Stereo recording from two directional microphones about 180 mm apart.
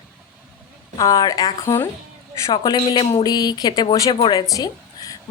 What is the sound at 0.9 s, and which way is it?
A woman's voice, 20° left (ahead or behind).